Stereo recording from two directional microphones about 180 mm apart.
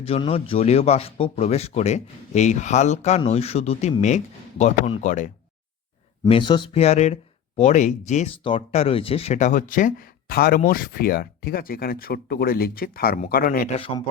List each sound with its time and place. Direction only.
0.0 s a man's voice: 30° left (ahead or behind)
6.2 s a man's voice: 30° left (ahead or behind); by 13.7 s 50° left (ahead or behind)
13.7 s speech: 30° left (ahead or behind)